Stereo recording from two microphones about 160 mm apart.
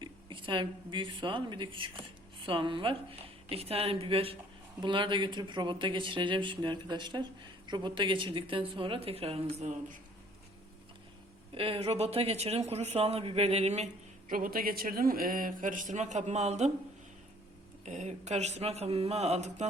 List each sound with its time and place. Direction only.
0.0 s a woman's voice: 30° right (ahead or behind)
11.5 s speech: 35° right (ahead or behind)
17.8 s speech: 50° right (ahead or behind)